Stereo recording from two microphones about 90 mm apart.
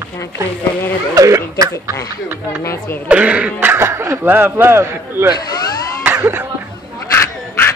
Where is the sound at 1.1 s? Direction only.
40° right (ahead or behind).